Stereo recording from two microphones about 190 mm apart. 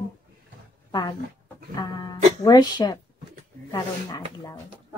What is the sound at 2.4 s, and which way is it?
A woman's voice, 20° left (ahead or behind).